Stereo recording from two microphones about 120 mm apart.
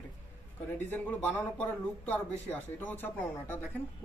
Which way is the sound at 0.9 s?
15° left (ahead or behind).